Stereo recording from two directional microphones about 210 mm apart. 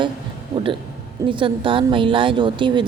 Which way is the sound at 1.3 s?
25° right (ahead or behind).